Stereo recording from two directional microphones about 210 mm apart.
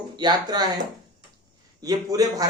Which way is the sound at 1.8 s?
15° right (ahead or behind).